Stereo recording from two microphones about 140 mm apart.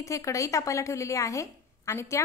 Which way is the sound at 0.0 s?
20° left (ahead or behind).